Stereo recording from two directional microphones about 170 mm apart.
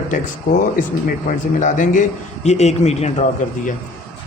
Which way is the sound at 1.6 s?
50° left (ahead or behind).